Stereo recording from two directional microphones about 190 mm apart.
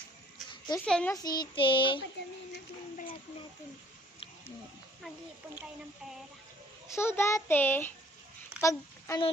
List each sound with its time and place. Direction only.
0.9 s a child's voice: 5° left (ahead or behind)
1.1 s child singing: 20° left (ahead or behind)
6.9 s a child's voice: 15° left (ahead or behind)